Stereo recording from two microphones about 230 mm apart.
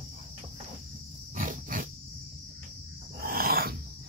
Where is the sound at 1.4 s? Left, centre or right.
Right.